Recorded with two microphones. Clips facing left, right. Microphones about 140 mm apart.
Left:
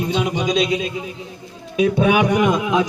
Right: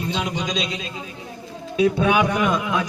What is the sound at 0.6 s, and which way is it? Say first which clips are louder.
A man's voice: left 8 dB; 10° left (ahead or behind).